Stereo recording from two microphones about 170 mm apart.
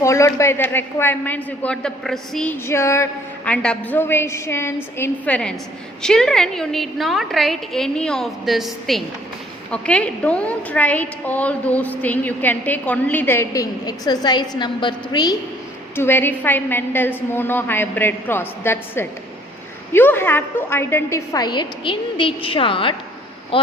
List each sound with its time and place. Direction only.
0.0 s a woman's voice: 15° left (ahead or behind)
16.0 s a woman's voice: 10° left (ahead or behind); by 23.0 s 30° left (ahead or behind)